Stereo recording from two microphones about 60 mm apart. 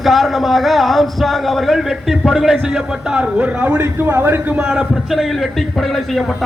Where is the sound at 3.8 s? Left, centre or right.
Right.